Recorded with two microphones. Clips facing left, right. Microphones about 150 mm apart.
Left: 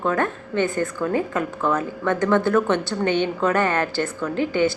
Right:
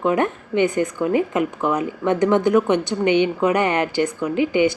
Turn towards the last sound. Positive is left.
turn(degrees=-15)  # may be behind; listen again after turning